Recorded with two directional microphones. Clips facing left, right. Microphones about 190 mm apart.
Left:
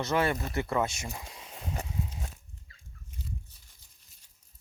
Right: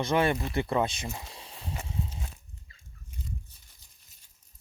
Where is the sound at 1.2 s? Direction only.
30° right (ahead or behind).